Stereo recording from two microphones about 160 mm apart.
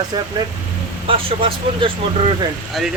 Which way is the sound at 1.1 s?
35° right (ahead or behind).